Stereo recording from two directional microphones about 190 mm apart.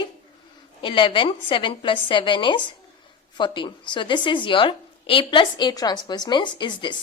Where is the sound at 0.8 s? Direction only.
25° left (ahead or behind).